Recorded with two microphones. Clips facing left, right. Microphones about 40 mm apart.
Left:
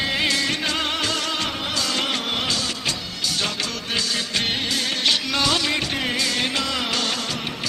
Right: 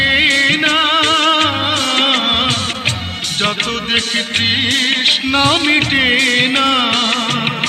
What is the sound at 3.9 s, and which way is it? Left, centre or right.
Music, right.